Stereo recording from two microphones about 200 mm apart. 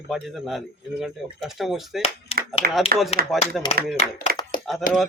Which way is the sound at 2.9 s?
50° right (ahead or behind).